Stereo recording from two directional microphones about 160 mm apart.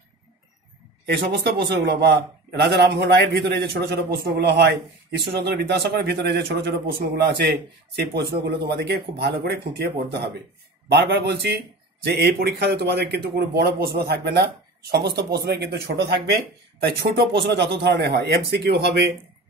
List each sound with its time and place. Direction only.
1.0 s a man's voice: 90° right